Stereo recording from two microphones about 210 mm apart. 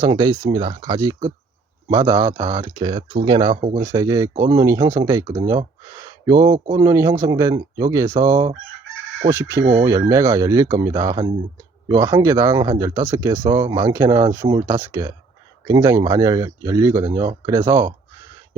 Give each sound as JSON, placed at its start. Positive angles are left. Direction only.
{"t": 0.0, "sound": "speech", "side_deg": -20}